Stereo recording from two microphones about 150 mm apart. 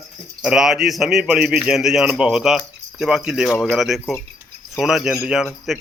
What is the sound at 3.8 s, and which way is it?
A man's voice, centre (ahead or behind).